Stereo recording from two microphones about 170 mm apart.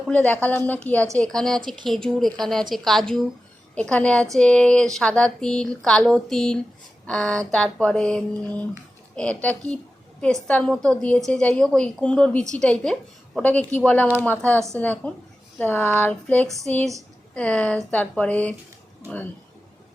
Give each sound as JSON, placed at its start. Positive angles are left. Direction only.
{"t": 0.1, "sound": "a woman's voice", "side_deg": 10}
{"t": 1.6, "sound": "speech", "side_deg": -25}
{"t": 1.9, "sound": "a woman's voice", "side_deg": 0}